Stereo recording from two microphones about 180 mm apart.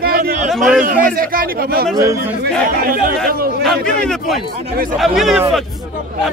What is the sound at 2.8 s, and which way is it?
Speech, 55° right (ahead or behind).